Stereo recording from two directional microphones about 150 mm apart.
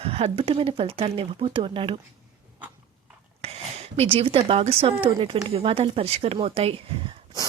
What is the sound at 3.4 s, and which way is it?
Speech, 45° right (ahead or behind).